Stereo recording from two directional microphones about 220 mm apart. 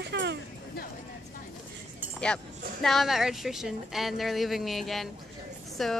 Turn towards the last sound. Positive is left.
turn(degrees=0)  # may be behind; listen again after turning